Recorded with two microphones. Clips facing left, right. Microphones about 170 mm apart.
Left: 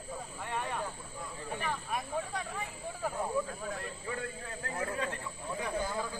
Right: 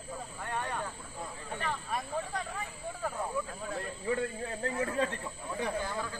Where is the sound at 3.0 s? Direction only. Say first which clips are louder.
Left 2 dB; 10° left (ahead or behind).